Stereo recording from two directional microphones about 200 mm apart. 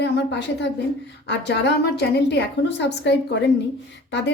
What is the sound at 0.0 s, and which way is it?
A woman's voice, 60° left (ahead or behind).